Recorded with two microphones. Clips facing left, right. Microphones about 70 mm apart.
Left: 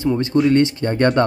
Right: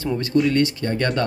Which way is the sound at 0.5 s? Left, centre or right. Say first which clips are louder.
Left 4 dB; left.